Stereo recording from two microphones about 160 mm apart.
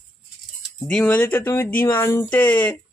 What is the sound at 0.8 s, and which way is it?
Speech, 5° left (ahead or behind).